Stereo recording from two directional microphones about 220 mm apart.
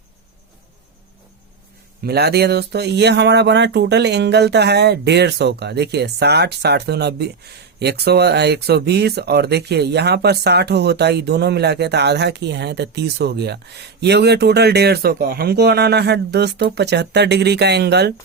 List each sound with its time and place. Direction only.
2.0 s speech: 45° right (ahead or behind)